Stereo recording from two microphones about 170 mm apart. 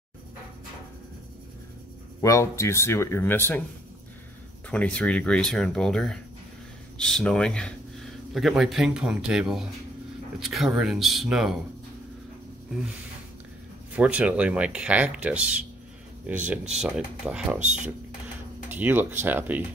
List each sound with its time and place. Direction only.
2.2 s speech: 15° left (ahead or behind)
4.6 s speech: 5° left (ahead or behind)
13.9 s speech: 5° right (ahead or behind)
17.6 s speech: 45° right (ahead or behind)
18.7 s speech: 10° right (ahead or behind)